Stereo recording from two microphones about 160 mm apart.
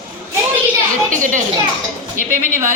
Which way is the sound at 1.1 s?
55° right (ahead or behind).